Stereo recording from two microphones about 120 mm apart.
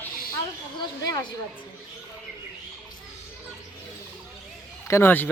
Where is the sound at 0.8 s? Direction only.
35° left (ahead or behind).